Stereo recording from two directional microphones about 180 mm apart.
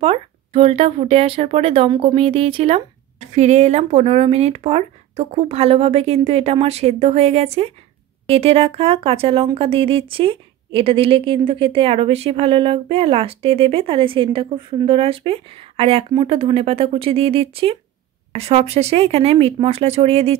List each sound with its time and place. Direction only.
0.0 s speech: 30° right (ahead or behind)